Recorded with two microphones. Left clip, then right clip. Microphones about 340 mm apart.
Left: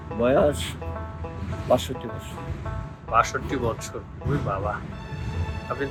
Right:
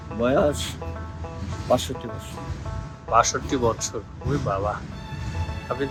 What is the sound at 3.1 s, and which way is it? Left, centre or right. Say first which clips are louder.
Speech: right 2 dB; centre.